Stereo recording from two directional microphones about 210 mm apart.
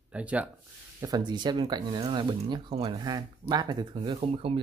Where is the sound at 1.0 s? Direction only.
20° right (ahead or behind).